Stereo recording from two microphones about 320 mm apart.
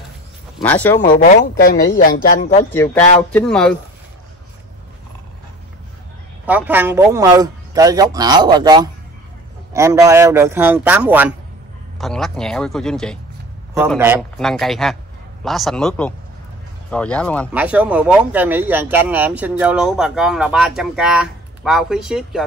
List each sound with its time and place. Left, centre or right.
0.6 s speech: centre
0.9 s speech: left
2.7 s speech: centre
6.4 s a man's voice: centre